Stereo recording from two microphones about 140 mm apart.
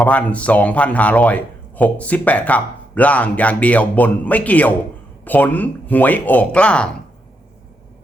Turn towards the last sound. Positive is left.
turn(degrees=10)  # may be behind; listen again after turning